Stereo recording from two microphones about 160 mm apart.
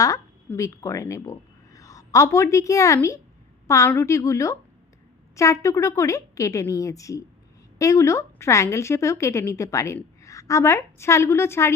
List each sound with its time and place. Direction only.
0.0 s a woman's voice: 20° left (ahead or behind)